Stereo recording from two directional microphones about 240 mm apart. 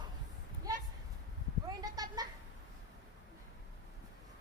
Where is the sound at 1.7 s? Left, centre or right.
Centre.